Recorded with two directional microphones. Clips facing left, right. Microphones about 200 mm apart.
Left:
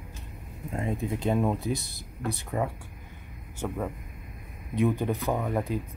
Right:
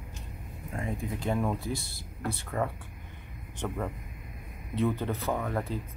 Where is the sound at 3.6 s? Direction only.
5° left (ahead or behind).